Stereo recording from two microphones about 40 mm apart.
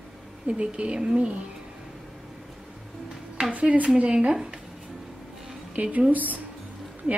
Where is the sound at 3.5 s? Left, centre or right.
Right.